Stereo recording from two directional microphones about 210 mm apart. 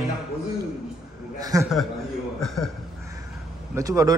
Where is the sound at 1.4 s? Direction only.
15° right (ahead or behind).